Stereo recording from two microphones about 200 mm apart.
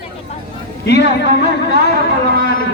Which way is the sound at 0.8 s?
55° left (ahead or behind).